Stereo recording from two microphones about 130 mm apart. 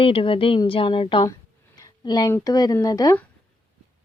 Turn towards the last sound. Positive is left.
turn(degrees=30)  # may be behind; listen again after turning